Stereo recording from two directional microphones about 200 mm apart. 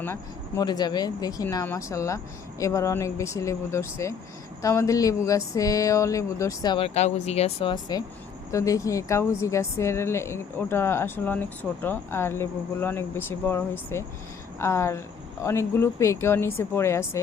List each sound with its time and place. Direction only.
0.0 s speech: 15° left (ahead or behind)